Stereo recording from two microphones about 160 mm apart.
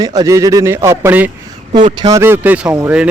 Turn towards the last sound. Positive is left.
turn(degrees=-10)  # may be behind; listen again after turning